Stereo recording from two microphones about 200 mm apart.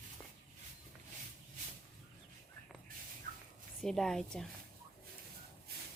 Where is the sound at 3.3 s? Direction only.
45° right (ahead or behind).